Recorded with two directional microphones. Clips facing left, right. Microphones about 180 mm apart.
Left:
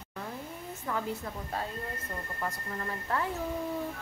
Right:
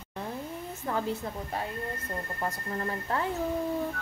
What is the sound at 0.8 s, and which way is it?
Speech, 30° right (ahead or behind).